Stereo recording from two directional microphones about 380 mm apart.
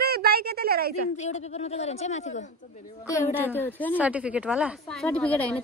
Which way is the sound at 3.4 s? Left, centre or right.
Centre.